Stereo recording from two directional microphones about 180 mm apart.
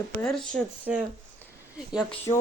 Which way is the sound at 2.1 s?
10° left (ahead or behind).